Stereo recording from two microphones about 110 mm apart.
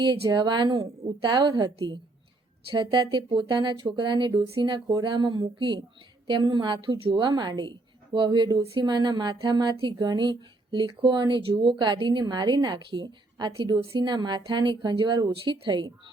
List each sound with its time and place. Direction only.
0.0 s speech: 40° right (ahead or behind)